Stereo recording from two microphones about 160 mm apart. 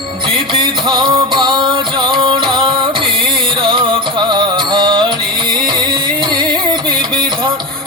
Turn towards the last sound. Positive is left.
turn(degrees=-30)  # may be behind; listen again after turning